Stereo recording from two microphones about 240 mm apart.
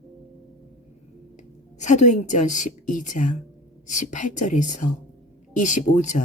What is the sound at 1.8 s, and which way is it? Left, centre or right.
Speech, left.